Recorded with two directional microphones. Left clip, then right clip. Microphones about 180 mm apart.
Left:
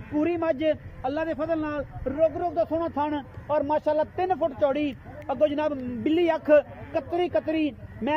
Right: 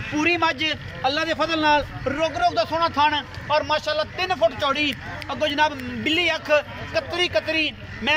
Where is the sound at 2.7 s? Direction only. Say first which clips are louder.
Right 7 dB; 55° left (ahead or behind).